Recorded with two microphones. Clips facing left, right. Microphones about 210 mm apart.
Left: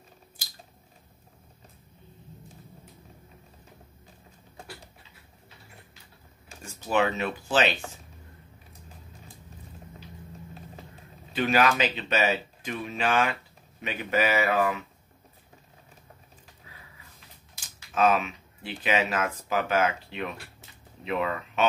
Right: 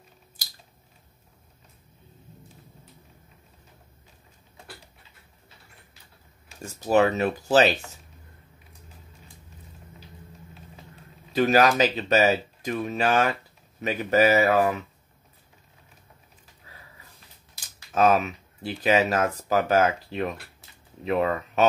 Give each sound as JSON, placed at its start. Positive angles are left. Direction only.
{"t": 6.6, "sound": "speech", "side_deg": -40}
{"t": 11.3, "sound": "speech", "side_deg": -40}
{"t": 17.7, "sound": "speech", "side_deg": -40}